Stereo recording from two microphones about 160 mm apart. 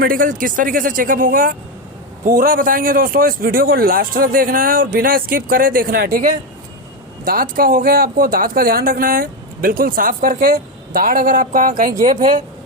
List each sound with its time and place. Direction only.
0.0 s speech: 60° right (ahead or behind)